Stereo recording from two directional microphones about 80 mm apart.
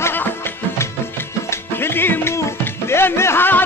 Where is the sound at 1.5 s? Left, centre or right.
Left.